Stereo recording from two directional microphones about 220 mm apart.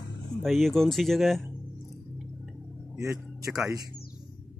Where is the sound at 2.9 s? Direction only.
10° right (ahead or behind).